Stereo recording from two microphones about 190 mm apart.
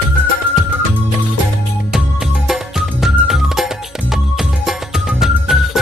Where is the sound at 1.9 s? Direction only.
5° right (ahead or behind).